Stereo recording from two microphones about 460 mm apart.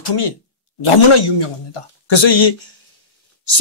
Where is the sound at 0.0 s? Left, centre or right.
Left.